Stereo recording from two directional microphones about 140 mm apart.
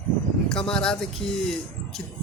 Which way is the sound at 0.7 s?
5° left (ahead or behind).